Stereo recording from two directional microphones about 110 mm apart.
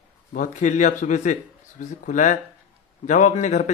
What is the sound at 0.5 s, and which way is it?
Speech, 90° left.